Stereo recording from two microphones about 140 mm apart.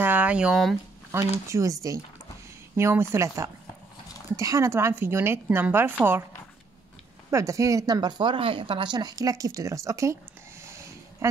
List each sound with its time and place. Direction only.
0.0 s speech: 10° right (ahead or behind)
1.1 s speech: 15° right (ahead or behind)
7.2 s speech: 20° right (ahead or behind)
10.6 s a sound: 20° right (ahead or behind)